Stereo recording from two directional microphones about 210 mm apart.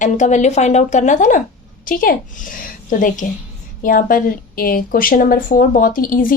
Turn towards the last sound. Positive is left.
turn(degrees=40)  # may be behind; listen again after turning